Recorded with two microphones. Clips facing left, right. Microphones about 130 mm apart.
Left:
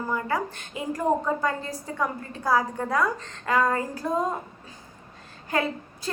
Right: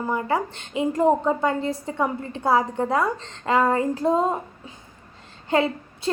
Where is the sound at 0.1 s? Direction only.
25° right (ahead or behind).